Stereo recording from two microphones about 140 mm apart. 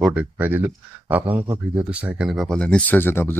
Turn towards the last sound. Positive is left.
turn(degrees=15)  # may be behind; listen again after turning